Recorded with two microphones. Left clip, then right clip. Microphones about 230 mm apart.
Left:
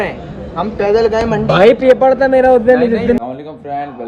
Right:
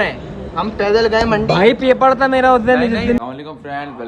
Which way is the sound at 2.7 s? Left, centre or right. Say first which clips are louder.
Left 3 dB; right.